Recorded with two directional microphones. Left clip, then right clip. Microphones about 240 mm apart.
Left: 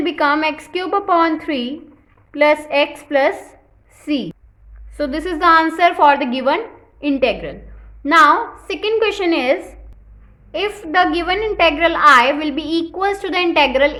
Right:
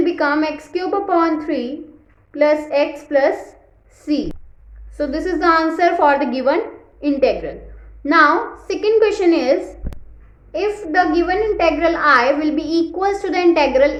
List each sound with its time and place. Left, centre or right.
0.0 s a woman's voice: left